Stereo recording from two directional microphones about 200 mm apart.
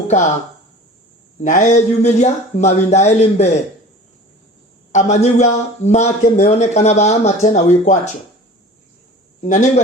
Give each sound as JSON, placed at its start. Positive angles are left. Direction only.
{"t": 1.4, "sound": "speech", "side_deg": 35}
{"t": 4.9, "sound": "speech", "side_deg": 35}
{"t": 9.4, "sound": "speech", "side_deg": 35}